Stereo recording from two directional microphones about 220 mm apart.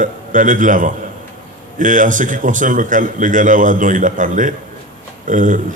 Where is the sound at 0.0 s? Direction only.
35° right (ahead or behind).